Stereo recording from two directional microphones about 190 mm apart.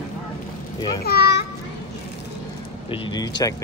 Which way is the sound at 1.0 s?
55° left (ahead or behind).